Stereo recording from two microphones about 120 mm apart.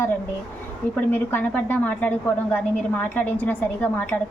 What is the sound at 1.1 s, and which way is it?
A woman's voice, 15° left (ahead or behind).